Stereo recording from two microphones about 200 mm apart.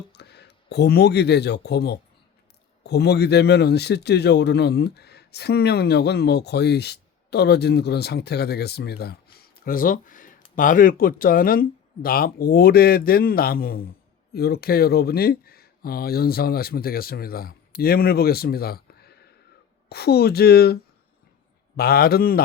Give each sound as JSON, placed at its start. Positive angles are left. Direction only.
{"t": 0.1, "sound": "speech", "side_deg": 55}
{"t": 21.8, "sound": "speech", "side_deg": 50}